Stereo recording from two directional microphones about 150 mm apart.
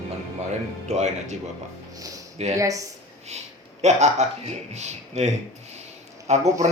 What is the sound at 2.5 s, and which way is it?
Speech, 20° right (ahead or behind).